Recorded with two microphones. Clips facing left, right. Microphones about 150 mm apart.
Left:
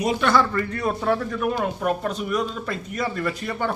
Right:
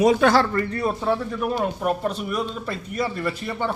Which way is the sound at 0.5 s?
35° right (ahead or behind).